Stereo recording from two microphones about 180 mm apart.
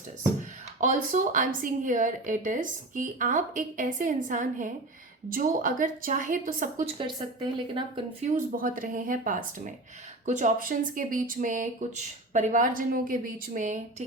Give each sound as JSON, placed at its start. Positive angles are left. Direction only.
{"t": 0.8, "sound": "a woman's voice", "side_deg": -45}
{"t": 7.2, "sound": "speech", "side_deg": -25}
{"t": 8.4, "sound": "a woman's voice", "side_deg": -50}